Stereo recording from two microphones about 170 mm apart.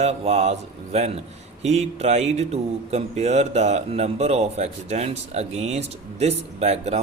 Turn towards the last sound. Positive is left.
turn(degrees=-40)  # may be behind; listen again after turning